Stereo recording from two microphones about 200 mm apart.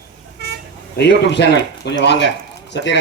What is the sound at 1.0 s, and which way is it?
A man's voice, 60° left (ahead or behind).